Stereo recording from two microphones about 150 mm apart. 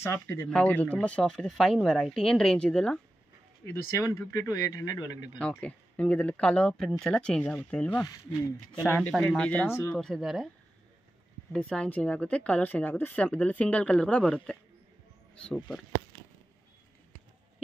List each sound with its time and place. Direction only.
0.0 s speech: 15° left (ahead or behind)
3.9 s speech: 20° left (ahead or behind)
5.4 s speech: 5° left (ahead or behind)
7.9 s speech: 25° left (ahead or behind)
8.8 s speech: 10° left (ahead or behind)
9.1 s speech: centre (ahead or behind)
11.5 s speech: 5° left (ahead or behind)